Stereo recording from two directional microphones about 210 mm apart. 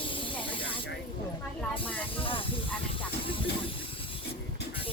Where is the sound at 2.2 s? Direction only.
25° left (ahead or behind).